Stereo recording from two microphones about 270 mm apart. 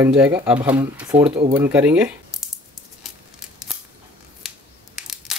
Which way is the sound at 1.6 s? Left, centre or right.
Centre.